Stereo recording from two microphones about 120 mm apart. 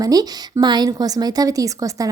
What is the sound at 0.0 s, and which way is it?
A woman's voice, 30° right (ahead or behind).